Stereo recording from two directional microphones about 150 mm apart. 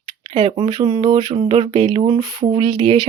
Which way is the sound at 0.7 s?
25° right (ahead or behind).